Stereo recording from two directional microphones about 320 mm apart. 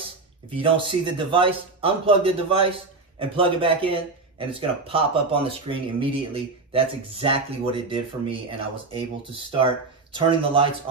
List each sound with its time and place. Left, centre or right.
0.6 s speech: centre